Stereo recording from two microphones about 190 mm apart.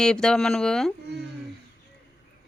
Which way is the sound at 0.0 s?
5° left (ahead or behind).